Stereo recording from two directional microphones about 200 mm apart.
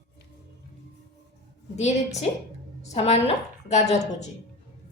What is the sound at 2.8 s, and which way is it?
A woman's voice, 30° left (ahead or behind).